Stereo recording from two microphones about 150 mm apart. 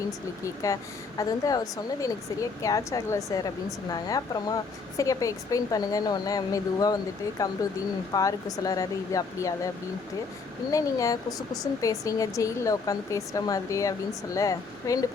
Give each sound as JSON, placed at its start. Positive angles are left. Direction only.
{"t": 0.4, "sound": "speech", "side_deg": 20}
{"t": 10.7, "sound": "speech", "side_deg": 20}